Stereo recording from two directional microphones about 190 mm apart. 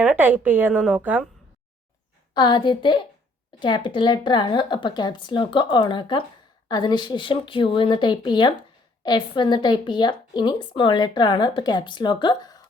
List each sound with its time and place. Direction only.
0.0 s a woman's voice: 10° right (ahead or behind)
2.3 s a woman's voice: 25° left (ahead or behind)